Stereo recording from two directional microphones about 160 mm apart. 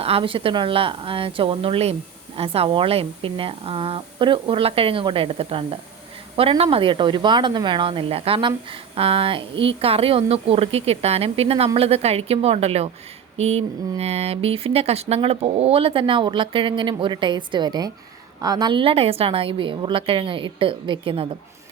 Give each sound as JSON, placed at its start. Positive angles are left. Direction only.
{"t": 0.0, "sound": "speech", "side_deg": -35}